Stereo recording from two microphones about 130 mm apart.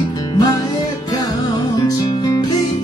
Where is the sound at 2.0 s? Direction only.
30° left (ahead or behind).